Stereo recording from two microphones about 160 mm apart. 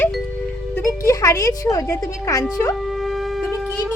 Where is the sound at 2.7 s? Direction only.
Centre (ahead or behind).